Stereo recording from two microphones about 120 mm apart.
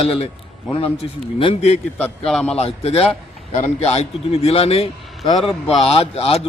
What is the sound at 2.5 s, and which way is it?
A man's voice, 55° left (ahead or behind).